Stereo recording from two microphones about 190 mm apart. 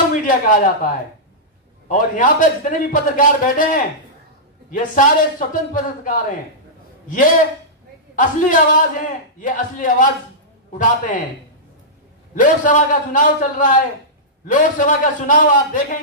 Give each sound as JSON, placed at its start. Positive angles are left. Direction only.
{"t": 0.1, "sound": "a man's voice", "side_deg": 45}
{"t": 12.4, "sound": "a man's voice", "side_deg": 40}